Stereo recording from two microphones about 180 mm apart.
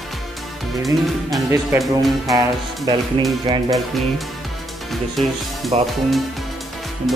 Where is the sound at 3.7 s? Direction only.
Centre (ahead or behind).